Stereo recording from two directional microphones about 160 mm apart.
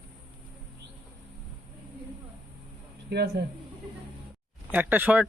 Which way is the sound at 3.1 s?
80° right.